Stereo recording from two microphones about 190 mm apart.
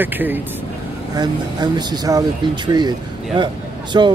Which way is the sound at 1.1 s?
20° right (ahead or behind).